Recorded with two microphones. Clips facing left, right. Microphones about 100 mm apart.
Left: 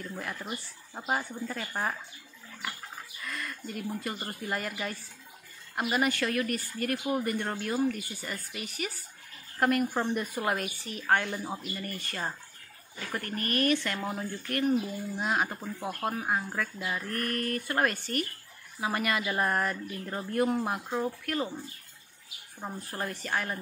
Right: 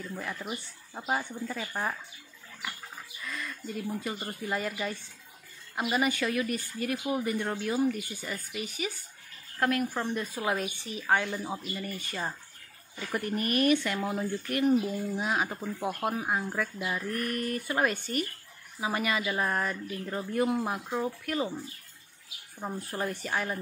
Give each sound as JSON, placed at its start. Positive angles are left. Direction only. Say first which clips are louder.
{"t": 0.0, "sound": "a woman's voice", "louder": "right 1 dB", "side_deg": 0}
{"t": 3.2, "sound": "a woman's voice", "louder": "even", "side_deg": 0}
{"t": 14.6, "sound": "speech", "louder": "right 2 dB", "side_deg": -15}
{"t": 15.1, "sound": "a woman's voice", "louder": "left 4 dB", "side_deg": 0}
{"t": 22.6, "sound": "a woman's voice", "louder": "right 2 dB", "side_deg": 0}